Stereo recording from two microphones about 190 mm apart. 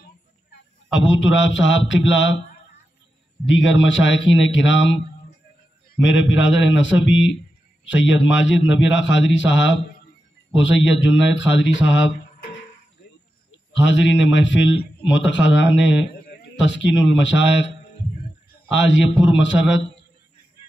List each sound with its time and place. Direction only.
0.9 s a man's voice: 75° left (ahead or behind)
3.4 s a man's voice: 75° left (ahead or behind)
6.0 s a man's voice: 75° left (ahead or behind)
13.7 s a man's voice: 75° left (ahead or behind)
18.7 s a man's voice: 75° left (ahead or behind)